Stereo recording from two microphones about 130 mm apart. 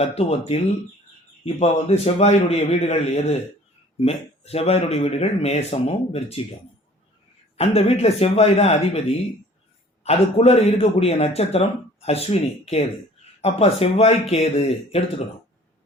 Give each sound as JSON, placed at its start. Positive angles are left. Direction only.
{"t": 0.0, "sound": "a man's voice", "side_deg": 50}
{"t": 7.5, "sound": "a man's voice", "side_deg": 50}
{"t": 10.0, "sound": "a man's voice", "side_deg": 50}